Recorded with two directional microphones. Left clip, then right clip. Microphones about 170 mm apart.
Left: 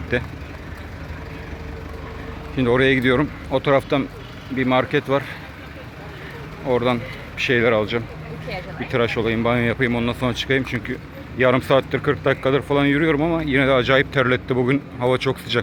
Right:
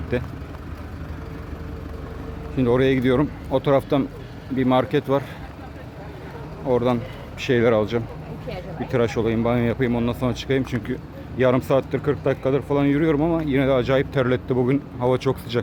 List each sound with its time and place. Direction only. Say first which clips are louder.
0.1 s speech: left 3 dB; 10° right (ahead or behind)
2.6 s speech: left 2 dB; 10° right (ahead or behind)
6.7 s speech: left 1 dB; 15° right (ahead or behind)